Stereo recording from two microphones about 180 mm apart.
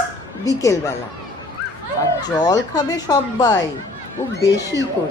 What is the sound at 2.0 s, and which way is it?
A woman's voice, 20° left (ahead or behind).